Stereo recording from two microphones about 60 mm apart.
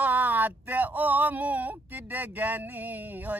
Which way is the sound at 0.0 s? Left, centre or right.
Right.